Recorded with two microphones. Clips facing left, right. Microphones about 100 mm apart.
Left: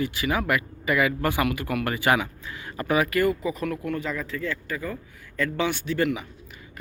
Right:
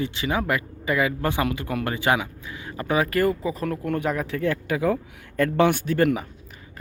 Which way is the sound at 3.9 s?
60° right (ahead or behind).